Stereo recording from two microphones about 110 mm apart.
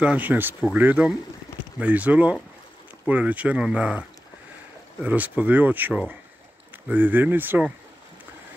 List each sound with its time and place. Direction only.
0.0 s speech: 15° right (ahead or behind)
5.0 s speech: 15° right (ahead or behind)